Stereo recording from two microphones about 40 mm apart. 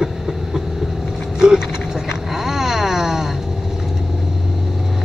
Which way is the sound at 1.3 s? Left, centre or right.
Centre.